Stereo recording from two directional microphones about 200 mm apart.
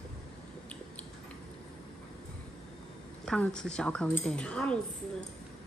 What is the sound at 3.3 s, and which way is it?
A woman's voice, 5° left (ahead or behind).